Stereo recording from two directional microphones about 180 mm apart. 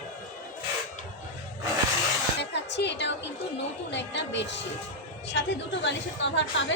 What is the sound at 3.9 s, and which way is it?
A woman's voice, 75° left (ahead or behind).